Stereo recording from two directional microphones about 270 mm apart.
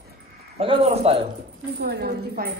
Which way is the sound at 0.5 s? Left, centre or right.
Centre.